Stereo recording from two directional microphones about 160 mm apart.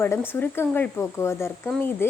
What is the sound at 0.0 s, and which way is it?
A woman's voice, 15° left (ahead or behind).